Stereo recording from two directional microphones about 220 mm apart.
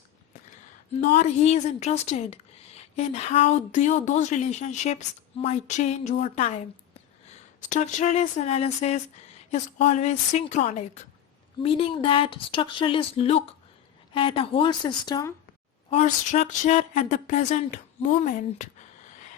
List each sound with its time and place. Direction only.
1.0 s a woman's voice: 35° left (ahead or behind)
7.7 s a woman's voice: 35° left (ahead or behind); by 15.3 s 20° left (ahead or behind)
15.9 s a woman's voice: 30° left (ahead or behind)